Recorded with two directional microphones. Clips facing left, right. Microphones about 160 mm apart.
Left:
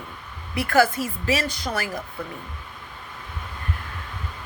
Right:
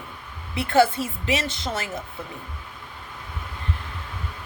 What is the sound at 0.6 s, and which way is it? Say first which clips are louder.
A woman's voice: right 1 dB; 25° right (ahead or behind).